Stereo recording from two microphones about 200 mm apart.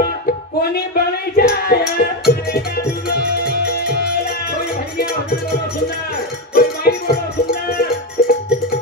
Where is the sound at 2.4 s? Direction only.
50° left (ahead or behind).